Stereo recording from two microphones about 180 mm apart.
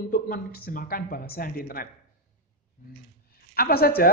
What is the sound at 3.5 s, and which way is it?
Speech, 55° left (ahead or behind).